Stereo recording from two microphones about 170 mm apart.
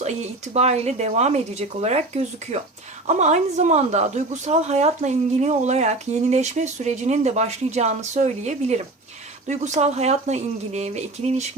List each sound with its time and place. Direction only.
0.0 s a woman's voice: 40° right (ahead or behind)